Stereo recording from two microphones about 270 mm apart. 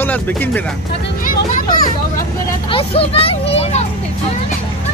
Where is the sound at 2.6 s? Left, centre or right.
Centre.